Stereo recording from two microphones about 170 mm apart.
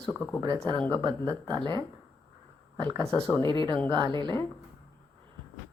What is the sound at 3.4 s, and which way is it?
Speech, 25° right (ahead or behind).